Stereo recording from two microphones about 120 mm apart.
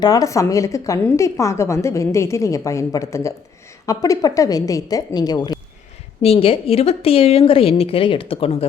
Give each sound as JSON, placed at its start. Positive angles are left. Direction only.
{"t": 0.0, "sound": "a woman's voice", "side_deg": 30}
{"t": 6.2, "sound": "a woman's voice", "side_deg": 55}